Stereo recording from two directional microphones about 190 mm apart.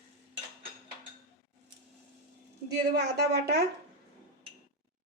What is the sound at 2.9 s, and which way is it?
Speech, 60° right (ahead or behind).